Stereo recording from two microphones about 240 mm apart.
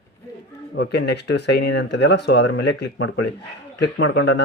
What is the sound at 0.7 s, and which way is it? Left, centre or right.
Speech, left.